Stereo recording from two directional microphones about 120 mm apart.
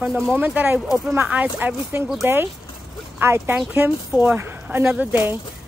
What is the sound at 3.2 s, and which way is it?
A woman's voice, 20° right (ahead or behind).